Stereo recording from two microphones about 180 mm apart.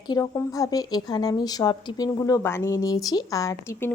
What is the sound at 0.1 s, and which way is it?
A woman's voice, 20° left (ahead or behind).